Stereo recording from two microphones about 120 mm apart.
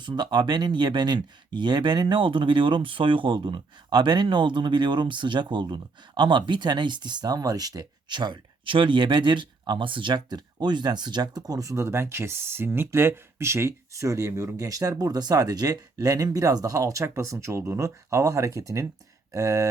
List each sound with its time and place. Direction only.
0.0 s speech: 40° right (ahead or behind)